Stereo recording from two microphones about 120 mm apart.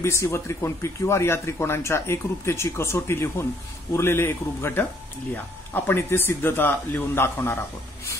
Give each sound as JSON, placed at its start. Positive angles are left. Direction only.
{"t": 0.0, "sound": "speech", "side_deg": 20}